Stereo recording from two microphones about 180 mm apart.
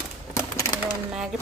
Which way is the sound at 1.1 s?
5° right (ahead or behind).